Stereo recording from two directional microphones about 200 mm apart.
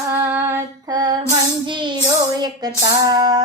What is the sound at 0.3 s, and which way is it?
Female singing, 10° right (ahead or behind).